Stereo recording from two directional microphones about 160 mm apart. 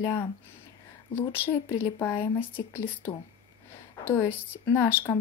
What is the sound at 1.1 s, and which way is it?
Speech, 15° left (ahead or behind).